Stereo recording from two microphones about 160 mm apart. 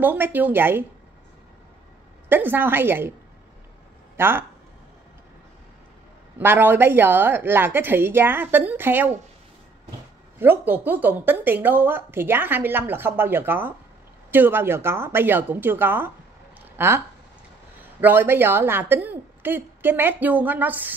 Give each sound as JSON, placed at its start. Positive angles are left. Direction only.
{"t": 0.0, "sound": "speech", "side_deg": -10}
{"t": 2.2, "sound": "speech", "side_deg": -10}
{"t": 4.2, "sound": "speech", "side_deg": -15}
{"t": 6.3, "sound": "speech", "side_deg": -10}
{"t": 10.4, "sound": "speech", "side_deg": -10}
{"t": 18.0, "sound": "speech", "side_deg": -15}